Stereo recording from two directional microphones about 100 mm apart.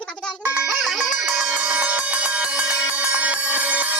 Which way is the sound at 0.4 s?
10° right (ahead or behind).